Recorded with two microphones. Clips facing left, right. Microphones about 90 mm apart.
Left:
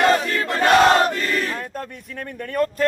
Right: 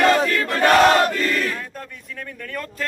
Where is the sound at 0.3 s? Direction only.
20° left (ahead or behind).